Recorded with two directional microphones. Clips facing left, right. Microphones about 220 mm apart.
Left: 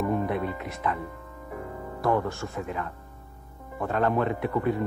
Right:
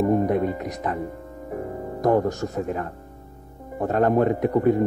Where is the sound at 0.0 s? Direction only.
40° right (ahead or behind).